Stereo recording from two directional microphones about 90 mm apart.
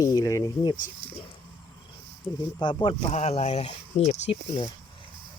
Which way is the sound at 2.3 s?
40° left (ahead or behind).